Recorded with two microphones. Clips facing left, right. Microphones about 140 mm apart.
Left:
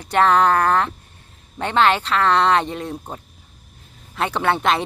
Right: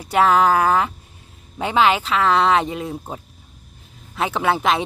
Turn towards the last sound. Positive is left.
turn(degrees=0)  # may be behind; listen again after turning